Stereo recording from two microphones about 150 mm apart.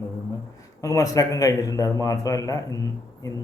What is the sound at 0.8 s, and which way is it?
A man's voice, 20° left (ahead or behind).